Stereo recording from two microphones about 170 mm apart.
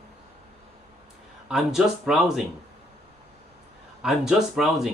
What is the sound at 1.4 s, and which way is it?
Speech, 5° right (ahead or behind).